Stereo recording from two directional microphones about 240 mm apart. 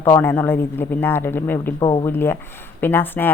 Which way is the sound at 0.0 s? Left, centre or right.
Centre.